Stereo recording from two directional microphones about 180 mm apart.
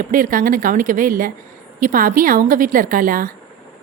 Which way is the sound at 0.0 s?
50° right (ahead or behind).